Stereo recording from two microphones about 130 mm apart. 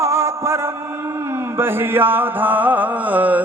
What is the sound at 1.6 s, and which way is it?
Mantra, 15° right (ahead or behind).